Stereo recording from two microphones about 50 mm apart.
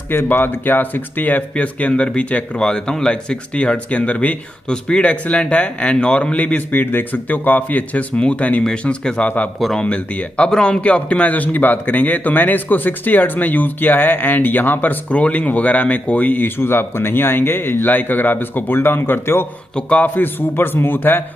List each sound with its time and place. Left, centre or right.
0.1 s a man's voice: left
2.6 s speech: centre
6.3 s a man's voice: left
8.8 s a man's voice: centre; by 19.4 s left
19.7 s speech: left
20.2 s a man's voice: left